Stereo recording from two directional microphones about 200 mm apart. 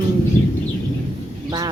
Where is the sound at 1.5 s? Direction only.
20° right (ahead or behind).